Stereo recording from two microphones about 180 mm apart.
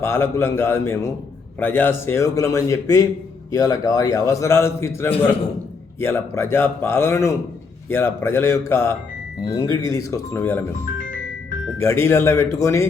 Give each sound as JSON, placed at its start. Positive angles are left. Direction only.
{"t": 0.0, "sound": "a man's voice", "side_deg": 15}
{"t": 11.8, "sound": "a man's voice", "side_deg": 15}